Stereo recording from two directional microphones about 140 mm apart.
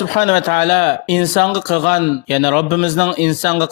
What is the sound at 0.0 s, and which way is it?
Speech, 55° left (ahead or behind).